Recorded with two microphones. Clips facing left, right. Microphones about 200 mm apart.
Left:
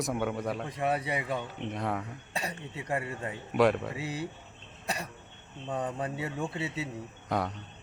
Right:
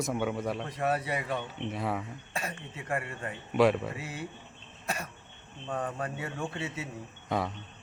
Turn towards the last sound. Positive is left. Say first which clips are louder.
# even
turn(degrees=0)  # may be behind; listen again after turning